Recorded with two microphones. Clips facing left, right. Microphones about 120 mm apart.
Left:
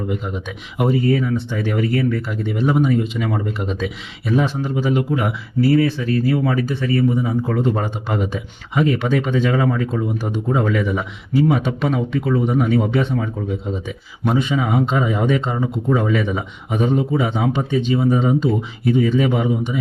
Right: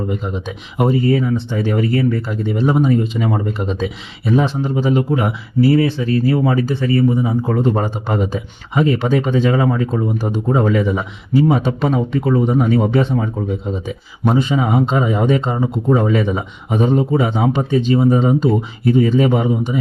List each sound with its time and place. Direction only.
0.1 s speech: 30° right (ahead or behind)
7.5 s speech: 40° right (ahead or behind)